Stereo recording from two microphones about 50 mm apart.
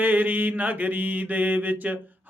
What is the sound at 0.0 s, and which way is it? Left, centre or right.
Mantra, right.